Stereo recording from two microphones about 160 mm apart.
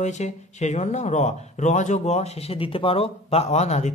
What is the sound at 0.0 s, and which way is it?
Speech, 45° left (ahead or behind).